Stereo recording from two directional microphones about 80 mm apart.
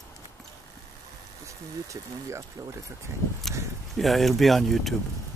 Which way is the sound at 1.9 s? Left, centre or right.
Right.